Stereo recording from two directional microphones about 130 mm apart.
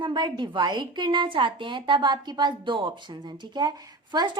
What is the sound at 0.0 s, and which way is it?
A woman's voice, 35° right (ahead or behind).